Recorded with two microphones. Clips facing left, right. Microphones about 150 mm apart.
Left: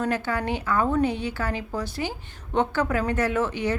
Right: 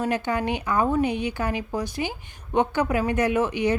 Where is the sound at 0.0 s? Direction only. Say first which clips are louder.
Right 1 dB; 20° right (ahead or behind).